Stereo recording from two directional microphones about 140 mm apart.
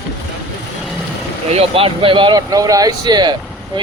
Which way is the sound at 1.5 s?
45° right (ahead or behind).